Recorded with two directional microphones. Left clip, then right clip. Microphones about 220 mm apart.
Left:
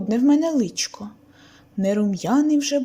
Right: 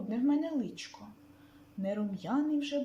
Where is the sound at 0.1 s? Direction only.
40° left (ahead or behind).